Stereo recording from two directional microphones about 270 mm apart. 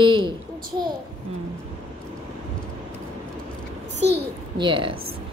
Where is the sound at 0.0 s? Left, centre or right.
Centre.